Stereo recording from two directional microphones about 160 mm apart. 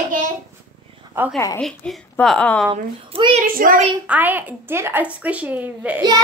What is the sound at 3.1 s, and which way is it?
Speech, 35° right (ahead or behind).